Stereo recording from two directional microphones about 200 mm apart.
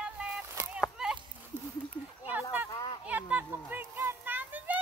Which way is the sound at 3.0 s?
10° right (ahead or behind).